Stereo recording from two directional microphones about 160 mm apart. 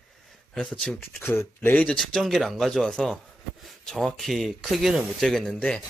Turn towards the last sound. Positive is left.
turn(degrees=5)  # may be behind; listen again after turning